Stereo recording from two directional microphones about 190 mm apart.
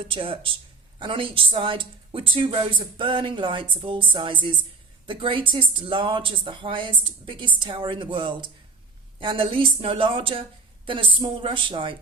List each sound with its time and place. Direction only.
0.0 s a woman's voice: 25° right (ahead or behind)